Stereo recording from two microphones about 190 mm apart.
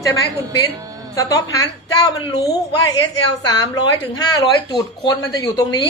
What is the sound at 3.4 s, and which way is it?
Speech, 20° left (ahead or behind).